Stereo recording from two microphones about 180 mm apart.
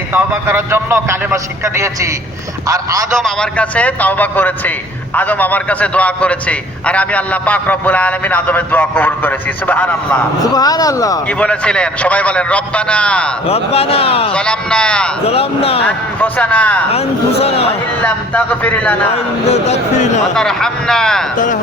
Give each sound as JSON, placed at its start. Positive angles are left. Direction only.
{"t": 0.1, "sound": "a man's voice", "side_deg": -10}
{"t": 3.2, "sound": "a man's voice", "side_deg": 5}
{"t": 10.4, "sound": "speech", "side_deg": 20}
{"t": 11.3, "sound": "a man's voice", "side_deg": 5}
{"t": 13.5, "sound": "speech", "side_deg": 35}
{"t": 14.3, "sound": "speech", "side_deg": 5}
{"t": 15.3, "sound": "speech", "side_deg": 35}
{"t": 16.2, "sound": "a man's voice", "side_deg": 10}
{"t": 16.9, "sound": "speech", "side_deg": 35}
{"t": 18.0, "sound": "a man's voice", "side_deg": 10}
{"t": 19.5, "sound": "speech", "side_deg": 35}
{"t": 20.3, "sound": "speech", "side_deg": 5}
{"t": 21.3, "sound": "speech", "side_deg": 45}